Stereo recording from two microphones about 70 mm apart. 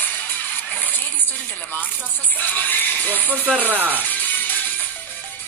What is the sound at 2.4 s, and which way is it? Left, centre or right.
Speech, left.